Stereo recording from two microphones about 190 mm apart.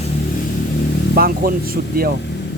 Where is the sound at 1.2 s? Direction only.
50° right (ahead or behind).